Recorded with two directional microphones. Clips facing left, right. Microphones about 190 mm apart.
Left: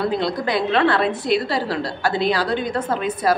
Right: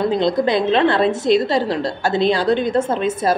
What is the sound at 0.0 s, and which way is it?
A woman's voice, 20° right (ahead or behind).